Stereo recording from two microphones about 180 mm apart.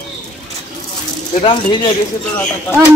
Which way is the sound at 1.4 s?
25° left (ahead or behind).